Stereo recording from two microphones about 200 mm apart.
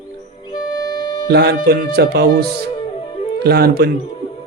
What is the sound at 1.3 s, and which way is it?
Speech, 55° right (ahead or behind).